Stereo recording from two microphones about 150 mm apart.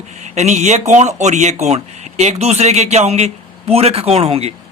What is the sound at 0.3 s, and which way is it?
Speech, 50° right (ahead or behind).